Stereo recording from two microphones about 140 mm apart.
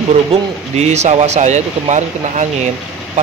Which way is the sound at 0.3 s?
50° right (ahead or behind).